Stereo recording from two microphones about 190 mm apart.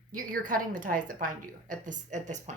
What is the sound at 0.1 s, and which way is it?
A woman's voice, 45° right (ahead or behind).